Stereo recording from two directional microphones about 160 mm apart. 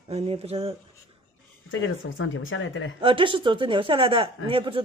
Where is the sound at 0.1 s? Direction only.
40° right (ahead or behind).